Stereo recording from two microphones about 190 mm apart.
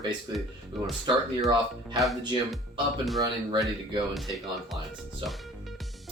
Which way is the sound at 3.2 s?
20° right (ahead or behind).